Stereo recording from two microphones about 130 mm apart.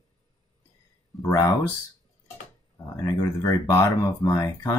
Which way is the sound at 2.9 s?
25° left (ahead or behind).